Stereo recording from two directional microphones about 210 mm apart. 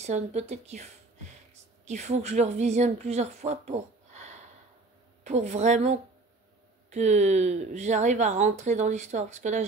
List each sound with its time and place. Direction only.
0.0 s a woman's voice: 30° right (ahead or behind)
1.9 s a woman's voice: 35° right (ahead or behind)